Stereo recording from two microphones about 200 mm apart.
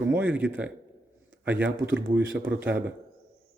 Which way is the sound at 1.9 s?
65° right (ahead or behind).